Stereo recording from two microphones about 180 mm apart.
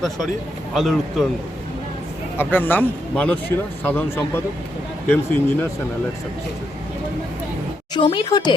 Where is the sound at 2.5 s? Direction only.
10° left (ahead or behind).